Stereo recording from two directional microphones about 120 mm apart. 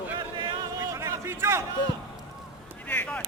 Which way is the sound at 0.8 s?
25° right (ahead or behind).